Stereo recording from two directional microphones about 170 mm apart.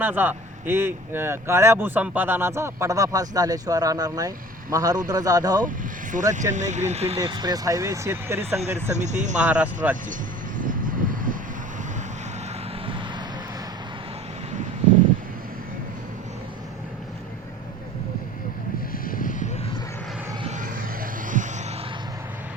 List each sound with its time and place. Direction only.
0.0 s speech: 10° right (ahead or behind)
5.6 s speech: 50° right (ahead or behind)
7.2 s speech: 25° right (ahead or behind)
8.9 s speech: 45° right (ahead or behind)
9.4 s speech: 10° right (ahead or behind)
10.6 s vehicle: 50° right (ahead or behind)
12.8 s vehicle: 30° right (ahead or behind)
19.0 s vehicle: 55° left (ahead or behind)
20.4 s a sound: 45° right (ahead or behind)